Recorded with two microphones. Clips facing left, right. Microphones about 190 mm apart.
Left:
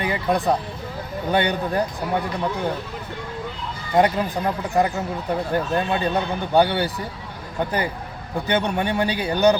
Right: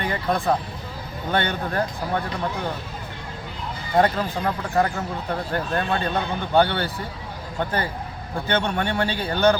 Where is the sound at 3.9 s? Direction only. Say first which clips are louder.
Left 2 dB; 15° left (ahead or behind).